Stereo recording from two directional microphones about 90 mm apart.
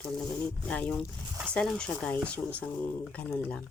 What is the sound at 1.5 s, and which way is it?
Speech, 10° left (ahead or behind).